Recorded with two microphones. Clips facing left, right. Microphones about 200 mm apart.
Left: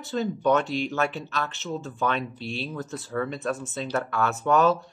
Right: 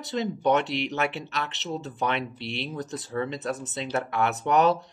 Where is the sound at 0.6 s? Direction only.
70° right (ahead or behind).